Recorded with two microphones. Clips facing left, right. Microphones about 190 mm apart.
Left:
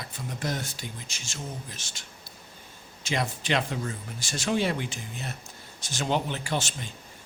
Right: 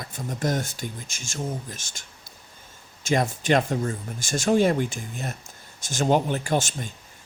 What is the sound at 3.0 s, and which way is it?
Speech, 45° right (ahead or behind).